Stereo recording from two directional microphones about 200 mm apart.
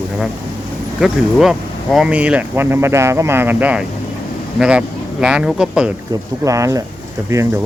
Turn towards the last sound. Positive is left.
turn(degrees=-15)  # may be behind; listen again after turning